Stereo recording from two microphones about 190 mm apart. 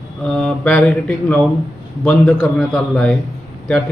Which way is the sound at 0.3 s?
5° left (ahead or behind).